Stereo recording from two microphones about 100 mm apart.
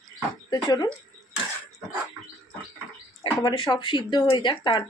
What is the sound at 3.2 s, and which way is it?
Speech, 55° left (ahead or behind).